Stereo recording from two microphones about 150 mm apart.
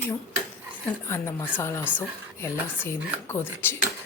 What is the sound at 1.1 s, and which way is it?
A woman's voice, 20° left (ahead or behind).